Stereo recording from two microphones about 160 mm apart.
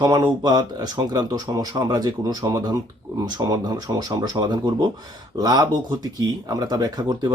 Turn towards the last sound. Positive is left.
turn(degrees=-25)  # may be behind; listen again after turning